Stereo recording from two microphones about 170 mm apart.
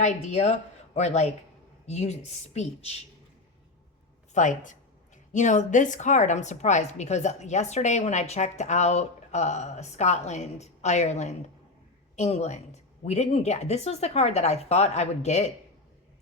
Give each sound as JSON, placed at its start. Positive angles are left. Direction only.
{"t": 0.0, "sound": "a woman's voice", "side_deg": 40}
{"t": 4.4, "sound": "a woman's voice", "side_deg": 45}